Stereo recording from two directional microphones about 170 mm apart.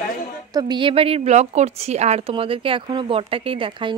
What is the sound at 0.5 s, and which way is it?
A woman's voice, 25° right (ahead or behind).